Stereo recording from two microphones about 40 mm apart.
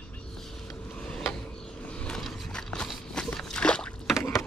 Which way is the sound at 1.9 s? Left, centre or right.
Left.